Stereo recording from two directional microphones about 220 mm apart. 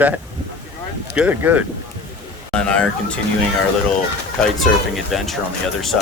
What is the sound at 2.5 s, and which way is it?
Speech, 5° left (ahead or behind).